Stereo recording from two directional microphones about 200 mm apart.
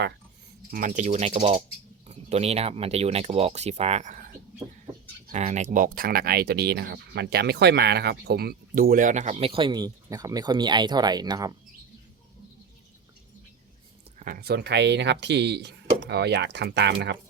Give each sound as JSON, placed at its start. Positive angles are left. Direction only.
{"t": 0.7, "sound": "speech", "side_deg": -40}
{"t": 5.3, "sound": "speech", "side_deg": -35}
{"t": 14.2, "sound": "speech", "side_deg": -45}